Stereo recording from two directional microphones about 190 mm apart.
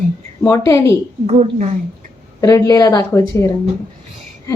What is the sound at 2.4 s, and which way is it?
Speech, 20° left (ahead or behind).